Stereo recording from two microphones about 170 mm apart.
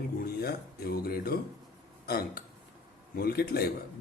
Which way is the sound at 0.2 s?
65° left (ahead or behind).